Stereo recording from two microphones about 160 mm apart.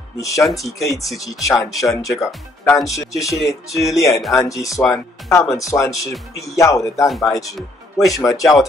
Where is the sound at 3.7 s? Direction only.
Centre (ahead or behind).